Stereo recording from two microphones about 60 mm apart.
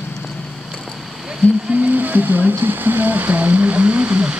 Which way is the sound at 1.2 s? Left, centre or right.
Centre.